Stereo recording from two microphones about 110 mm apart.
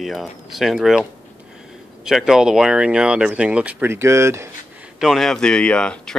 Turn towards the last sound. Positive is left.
turn(degrees=10)  # may be behind; listen again after turning